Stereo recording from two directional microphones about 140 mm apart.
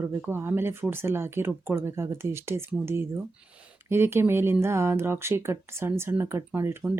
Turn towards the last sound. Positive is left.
turn(degrees=-15)  # may be behind; listen again after turning